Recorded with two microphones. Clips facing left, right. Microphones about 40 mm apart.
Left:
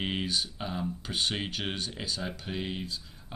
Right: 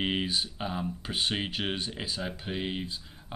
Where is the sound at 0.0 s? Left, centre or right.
Centre.